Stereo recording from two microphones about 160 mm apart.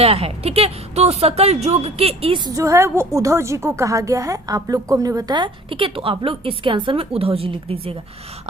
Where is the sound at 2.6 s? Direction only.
20° right (ahead or behind).